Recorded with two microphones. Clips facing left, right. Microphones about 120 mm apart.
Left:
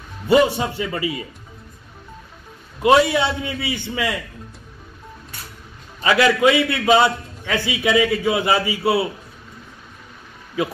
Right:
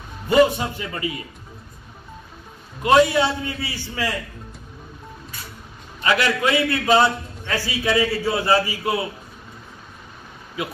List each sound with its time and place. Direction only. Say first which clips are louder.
0.3 s a man's voice: left 1 dB; 25° left (ahead or behind)
2.8 s a man's voice: left 1 dB; 20° left (ahead or behind)
6.0 s a man's voice: left 5 dB; 20° left (ahead or behind)